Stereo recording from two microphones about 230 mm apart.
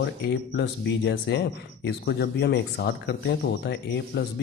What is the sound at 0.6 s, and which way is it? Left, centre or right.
A man's voice, left.